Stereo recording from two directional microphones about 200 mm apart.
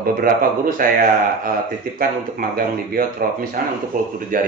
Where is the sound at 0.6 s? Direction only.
45° right (ahead or behind).